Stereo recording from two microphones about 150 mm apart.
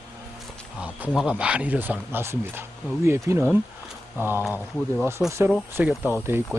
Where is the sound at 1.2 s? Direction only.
5° right (ahead or behind).